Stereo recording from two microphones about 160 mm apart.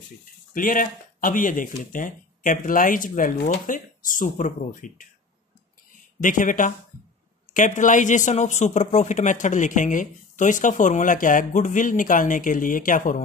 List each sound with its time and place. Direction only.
0.6 s speech: 60° left (ahead or behind)
6.2 s speech: 55° left (ahead or behind)